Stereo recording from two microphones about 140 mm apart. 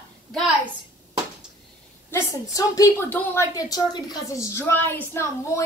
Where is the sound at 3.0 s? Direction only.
15° left (ahead or behind); by 4.3 s 30° left (ahead or behind).